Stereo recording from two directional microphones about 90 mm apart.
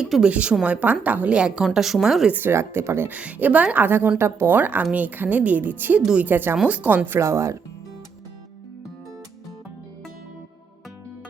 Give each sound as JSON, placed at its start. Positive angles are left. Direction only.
{"t": 0.0, "sound": "speech", "side_deg": -10}
{"t": 2.3, "sound": "a woman's voice", "side_deg": -25}
{"t": 3.1, "sound": "a woman's voice", "side_deg": -15}
{"t": 7.2, "sound": "speech", "side_deg": -30}